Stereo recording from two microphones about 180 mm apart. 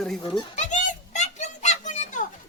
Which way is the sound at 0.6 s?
40° left (ahead or behind).